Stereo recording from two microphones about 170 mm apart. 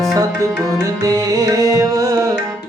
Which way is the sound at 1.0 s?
20° right (ahead or behind).